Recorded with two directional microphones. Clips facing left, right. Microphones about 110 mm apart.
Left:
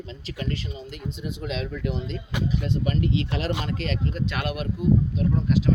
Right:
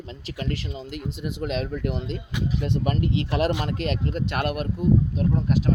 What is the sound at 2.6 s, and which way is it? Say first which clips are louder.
Speech: right 3 dB; 65° right (ahead or behind).